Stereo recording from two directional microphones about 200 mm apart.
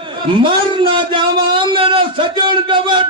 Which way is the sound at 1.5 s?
25° right (ahead or behind).